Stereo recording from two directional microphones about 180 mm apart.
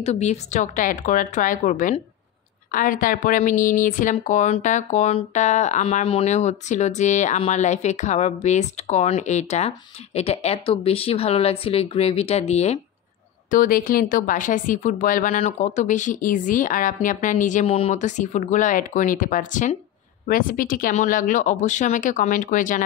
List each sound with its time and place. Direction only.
0.0 s a woman's voice: 35° left (ahead or behind)
13.5 s a woman's voice: 50° left (ahead or behind)